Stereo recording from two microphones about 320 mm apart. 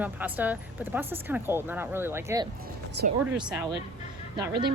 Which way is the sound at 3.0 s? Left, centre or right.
Right.